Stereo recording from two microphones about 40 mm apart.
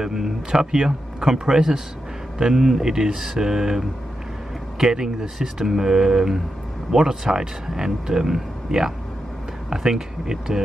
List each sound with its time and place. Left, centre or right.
0.0 s speech: centre